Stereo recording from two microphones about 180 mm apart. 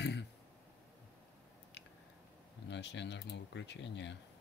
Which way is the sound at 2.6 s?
75° left (ahead or behind).